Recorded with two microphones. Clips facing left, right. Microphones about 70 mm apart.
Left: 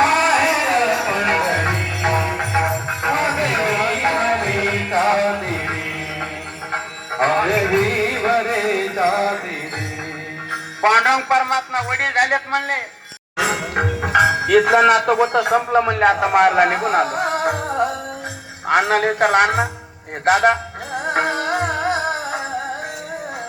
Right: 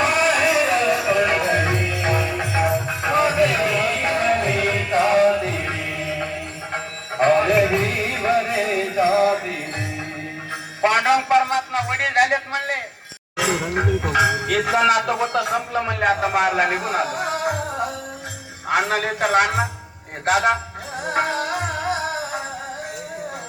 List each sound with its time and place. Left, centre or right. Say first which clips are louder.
0.0 s music: left 3 dB; left
10.5 s music: left 4 dB; left
14.8 s speech: left 4 dB; left
16.0 s music: left 2 dB; left
18.7 s a man's voice: left 4 dB; left
21.1 s music: left 2 dB; left